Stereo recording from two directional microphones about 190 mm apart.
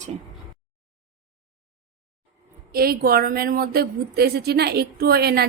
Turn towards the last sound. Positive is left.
turn(degrees=-55)  # may be behind; listen again after turning